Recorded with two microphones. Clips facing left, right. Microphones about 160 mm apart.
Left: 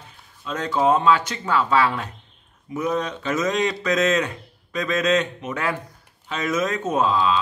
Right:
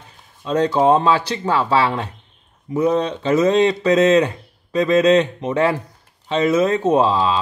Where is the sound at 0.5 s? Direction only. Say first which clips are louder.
Right 5 dB; 35° right (ahead or behind).